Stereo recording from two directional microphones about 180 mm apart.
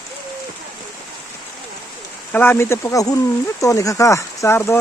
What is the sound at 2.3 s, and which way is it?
Speech, 10° left (ahead or behind).